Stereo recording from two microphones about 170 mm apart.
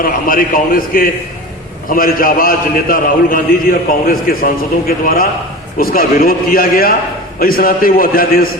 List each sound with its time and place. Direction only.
0.0 s a man's voice: 55° left (ahead or behind)